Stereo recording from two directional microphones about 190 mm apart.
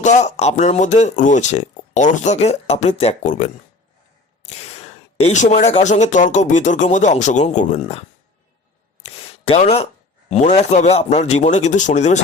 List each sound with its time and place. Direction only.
0.0 s speech: 40° left (ahead or behind)
4.6 s speech: 35° left (ahead or behind)
9.0 s speech: 30° left (ahead or behind)